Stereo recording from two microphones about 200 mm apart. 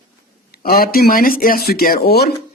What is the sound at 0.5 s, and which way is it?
Speech, 45° left (ahead or behind).